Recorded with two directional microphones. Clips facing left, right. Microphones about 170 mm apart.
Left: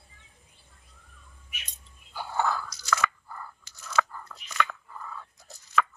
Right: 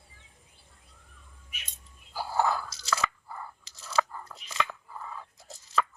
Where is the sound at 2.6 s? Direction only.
30° right (ahead or behind).